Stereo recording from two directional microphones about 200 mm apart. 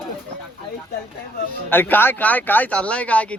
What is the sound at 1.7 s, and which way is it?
Speech, 10° left (ahead or behind).